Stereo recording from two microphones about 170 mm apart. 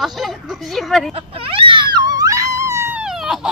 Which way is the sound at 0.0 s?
Centre (ahead or behind).